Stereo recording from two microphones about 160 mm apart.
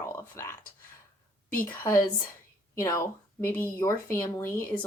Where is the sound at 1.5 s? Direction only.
10° left (ahead or behind).